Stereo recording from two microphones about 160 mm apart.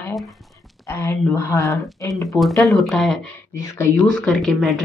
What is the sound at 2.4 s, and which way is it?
Speech, centre (ahead or behind).